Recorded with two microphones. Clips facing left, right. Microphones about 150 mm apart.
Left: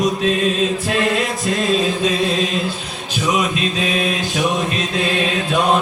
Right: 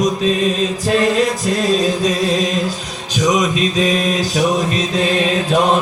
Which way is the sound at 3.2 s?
40° right (ahead or behind).